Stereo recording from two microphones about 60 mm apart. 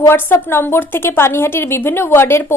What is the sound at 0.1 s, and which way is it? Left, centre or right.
A woman's voice, left.